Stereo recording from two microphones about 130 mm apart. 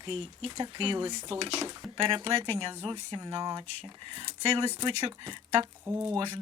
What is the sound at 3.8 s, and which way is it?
Speech, 45° right (ahead or behind).